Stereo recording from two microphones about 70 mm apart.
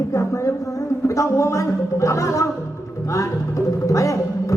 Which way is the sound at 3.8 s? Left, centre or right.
Left.